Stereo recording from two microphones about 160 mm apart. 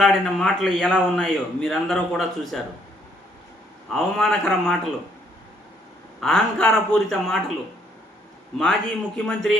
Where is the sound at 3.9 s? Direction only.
5° left (ahead or behind).